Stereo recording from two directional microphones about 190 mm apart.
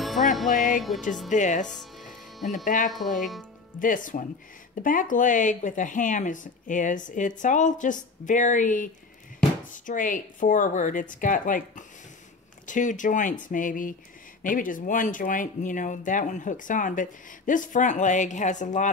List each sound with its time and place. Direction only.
0.0 s music: centre (ahead or behind)
0.5 s music: 45° left (ahead or behind)
1.3 s speech: 40° left (ahead or behind)